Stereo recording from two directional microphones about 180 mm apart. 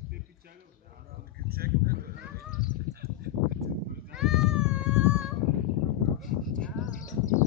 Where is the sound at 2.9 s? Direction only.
60° right (ahead or behind).